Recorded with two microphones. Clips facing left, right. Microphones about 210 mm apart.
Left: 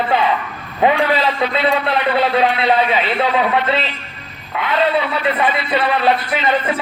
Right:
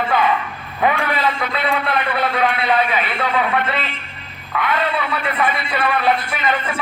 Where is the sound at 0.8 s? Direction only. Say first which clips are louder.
Left 4 dB; 25° left (ahead or behind).